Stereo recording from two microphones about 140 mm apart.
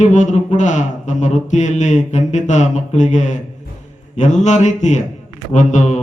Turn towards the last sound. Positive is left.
turn(degrees=55)  # may be behind; listen again after turning